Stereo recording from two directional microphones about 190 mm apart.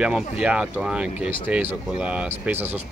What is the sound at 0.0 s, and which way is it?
Speech, 5° right (ahead or behind).